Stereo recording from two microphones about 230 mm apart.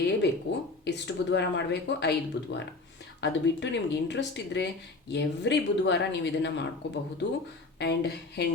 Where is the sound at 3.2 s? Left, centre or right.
Left.